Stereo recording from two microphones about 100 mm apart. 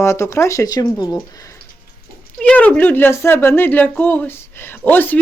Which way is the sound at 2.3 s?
15° left (ahead or behind).